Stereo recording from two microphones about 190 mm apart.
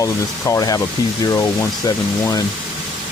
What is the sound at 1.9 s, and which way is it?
Speech, 20° left (ahead or behind).